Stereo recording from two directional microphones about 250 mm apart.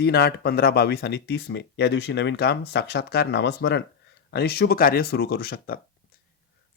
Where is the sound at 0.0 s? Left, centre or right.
Left.